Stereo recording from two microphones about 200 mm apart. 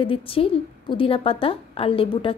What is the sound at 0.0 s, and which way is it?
A woman's voice, 25° left (ahead or behind).